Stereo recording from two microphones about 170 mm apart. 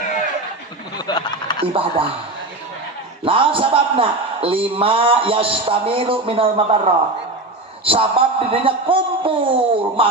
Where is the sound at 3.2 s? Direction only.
30° right (ahead or behind).